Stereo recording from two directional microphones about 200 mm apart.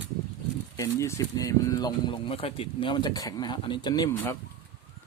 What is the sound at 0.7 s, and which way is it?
Speech, 15° left (ahead or behind).